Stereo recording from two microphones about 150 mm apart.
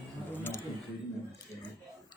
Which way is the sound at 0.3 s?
15° left (ahead or behind).